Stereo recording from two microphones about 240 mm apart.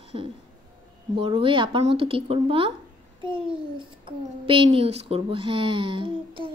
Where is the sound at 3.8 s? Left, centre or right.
Right.